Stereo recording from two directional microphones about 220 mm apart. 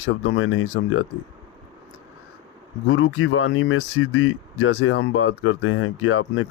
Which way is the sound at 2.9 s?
65° left (ahead or behind).